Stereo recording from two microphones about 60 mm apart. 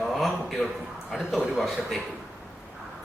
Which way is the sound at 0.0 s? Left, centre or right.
Centre.